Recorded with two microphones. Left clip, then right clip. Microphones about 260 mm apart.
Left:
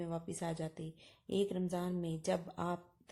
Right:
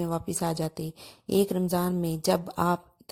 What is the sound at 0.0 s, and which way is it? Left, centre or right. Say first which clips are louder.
A woman's voice: right 11 dB; right.